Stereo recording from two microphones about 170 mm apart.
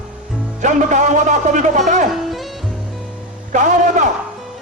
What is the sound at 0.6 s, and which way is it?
Speech, 45° right (ahead or behind).